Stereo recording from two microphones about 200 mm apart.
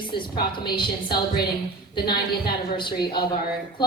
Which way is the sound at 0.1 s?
25° left (ahead or behind).